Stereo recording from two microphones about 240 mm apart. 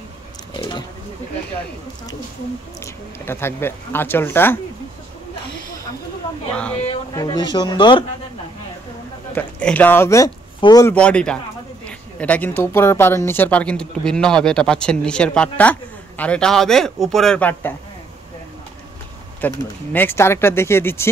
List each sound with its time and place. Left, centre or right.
0.6 s a sound: centre
2.8 s speech: centre
7.2 s speech: centre
9.3 s a woman's voice: centre
19.4 s speech: centre